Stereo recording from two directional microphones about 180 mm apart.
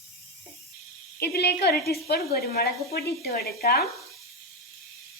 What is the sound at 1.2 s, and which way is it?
A woman's voice, 65° left (ahead or behind).